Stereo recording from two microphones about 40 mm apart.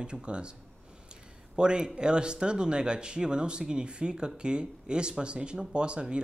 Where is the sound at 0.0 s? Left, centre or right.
Right.